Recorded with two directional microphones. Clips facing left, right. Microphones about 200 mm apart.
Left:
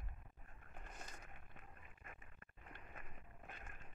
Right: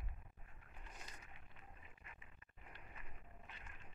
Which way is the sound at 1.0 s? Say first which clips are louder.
Left 3 dB; 50° left (ahead or behind).